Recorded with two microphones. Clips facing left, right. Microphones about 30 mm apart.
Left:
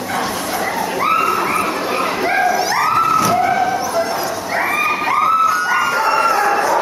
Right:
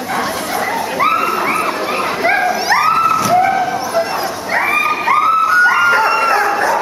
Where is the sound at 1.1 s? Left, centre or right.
Centre.